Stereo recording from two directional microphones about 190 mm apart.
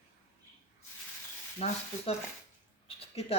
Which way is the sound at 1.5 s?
35° left (ahead or behind).